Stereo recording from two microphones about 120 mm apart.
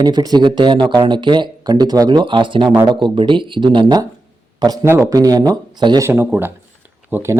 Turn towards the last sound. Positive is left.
turn(degrees=-20)  # may be behind; listen again after turning